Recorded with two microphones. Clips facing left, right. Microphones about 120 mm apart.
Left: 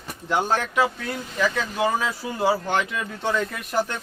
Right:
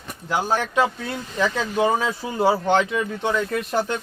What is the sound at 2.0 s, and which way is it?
Speech, 25° right (ahead or behind).